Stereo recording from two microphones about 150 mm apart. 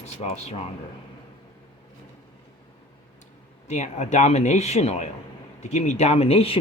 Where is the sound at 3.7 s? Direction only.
50° left (ahead or behind).